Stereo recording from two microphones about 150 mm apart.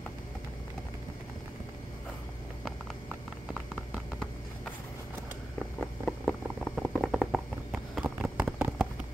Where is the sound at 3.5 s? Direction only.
5° right (ahead or behind).